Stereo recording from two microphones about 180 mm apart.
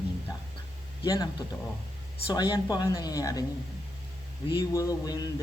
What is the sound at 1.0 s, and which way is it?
Speech, 20° left (ahead or behind).